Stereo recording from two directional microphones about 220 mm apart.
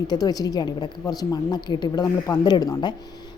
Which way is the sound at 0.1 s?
15° left (ahead or behind).